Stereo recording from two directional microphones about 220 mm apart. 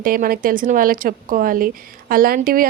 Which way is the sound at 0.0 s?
40° right (ahead or behind).